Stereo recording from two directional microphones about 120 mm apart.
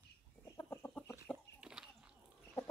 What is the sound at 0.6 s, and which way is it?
Chicken, 20° left (ahead or behind).